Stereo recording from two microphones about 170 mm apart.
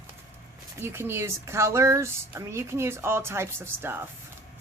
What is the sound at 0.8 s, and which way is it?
A woman's voice, 15° right (ahead or behind).